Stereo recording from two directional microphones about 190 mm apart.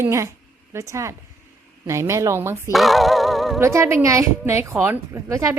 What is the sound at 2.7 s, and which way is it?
Music, centre (ahead or behind).